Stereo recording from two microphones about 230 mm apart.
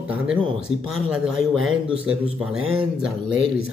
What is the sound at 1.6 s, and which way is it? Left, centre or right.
Speech, right.